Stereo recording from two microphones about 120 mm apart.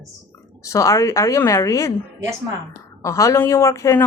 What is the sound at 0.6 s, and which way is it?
Speech, 25° left (ahead or behind).